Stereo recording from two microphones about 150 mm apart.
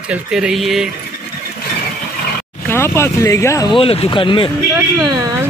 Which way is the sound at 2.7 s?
15° left (ahead or behind).